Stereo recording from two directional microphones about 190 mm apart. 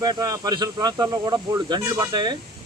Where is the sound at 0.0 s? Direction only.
20° right (ahead or behind).